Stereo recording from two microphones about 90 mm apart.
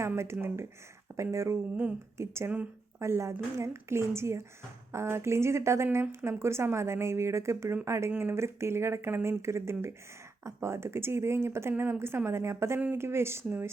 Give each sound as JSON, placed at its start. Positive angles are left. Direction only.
{"t": 0.1, "sound": "speech", "side_deg": -30}